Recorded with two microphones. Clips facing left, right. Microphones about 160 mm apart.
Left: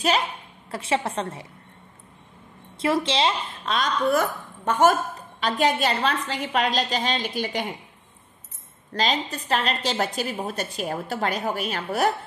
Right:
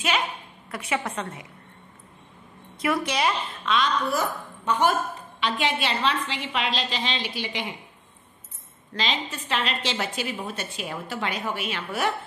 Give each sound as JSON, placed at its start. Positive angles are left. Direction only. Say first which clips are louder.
{"t": 0.7, "sound": "a woman's voice", "louder": "left 3 dB", "side_deg": 30}
{"t": 2.8, "sound": "speech", "louder": "left 2 dB", "side_deg": 25}
{"t": 3.7, "sound": "a woman's voice", "louder": "left 2 dB", "side_deg": 50}
{"t": 8.9, "sound": "a woman's voice", "louder": "left 4 dB", "side_deg": 40}